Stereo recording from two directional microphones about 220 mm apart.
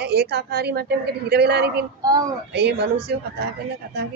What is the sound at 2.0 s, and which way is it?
Speech, 15° right (ahead or behind).